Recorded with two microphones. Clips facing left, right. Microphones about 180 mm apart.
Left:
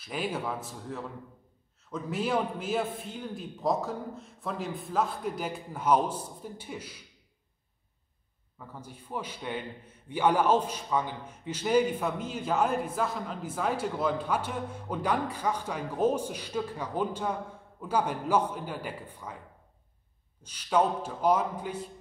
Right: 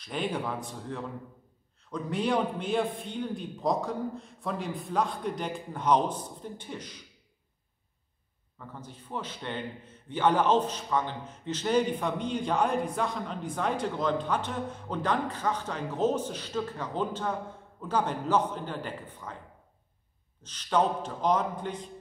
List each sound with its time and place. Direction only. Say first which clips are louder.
0.0 s a man's voice: right 1 dB; 5° left (ahead or behind)
8.5 s a man's voice: right 1 dB; 10° left (ahead or behind)
20.4 s a man's voice: even; 10° left (ahead or behind)